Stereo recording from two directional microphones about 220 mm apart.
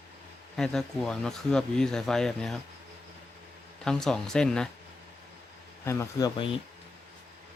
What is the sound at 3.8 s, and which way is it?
Speech, 5° left (ahead or behind).